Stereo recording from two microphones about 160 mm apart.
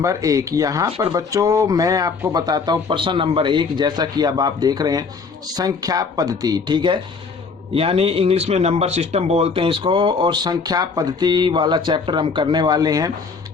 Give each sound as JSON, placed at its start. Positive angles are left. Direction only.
{"t": 0.0, "sound": "speech", "side_deg": -20}